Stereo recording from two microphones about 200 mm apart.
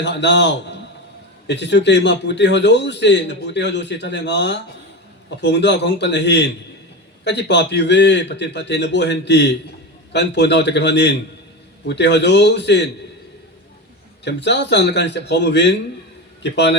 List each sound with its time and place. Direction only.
0.0 s a man's voice: 60° left (ahead or behind)
14.3 s a man's voice: 60° left (ahead or behind)